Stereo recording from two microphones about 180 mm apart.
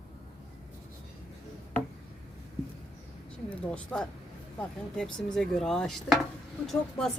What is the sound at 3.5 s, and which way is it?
A woman's voice, 5° left (ahead or behind).